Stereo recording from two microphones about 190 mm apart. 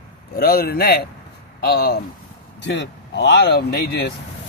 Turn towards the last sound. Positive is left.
turn(degrees=60)  # may be behind; listen again after turning